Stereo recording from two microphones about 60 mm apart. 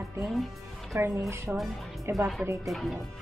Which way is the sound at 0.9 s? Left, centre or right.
Right.